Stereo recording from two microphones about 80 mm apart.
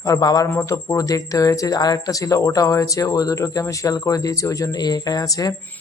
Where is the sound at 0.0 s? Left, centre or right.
Left.